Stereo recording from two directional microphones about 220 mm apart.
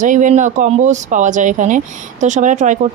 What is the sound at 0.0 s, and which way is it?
A woman's voice, 35° right (ahead or behind).